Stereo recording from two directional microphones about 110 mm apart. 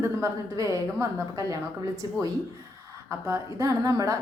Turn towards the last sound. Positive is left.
turn(degrees=-30)  # may be behind; listen again after turning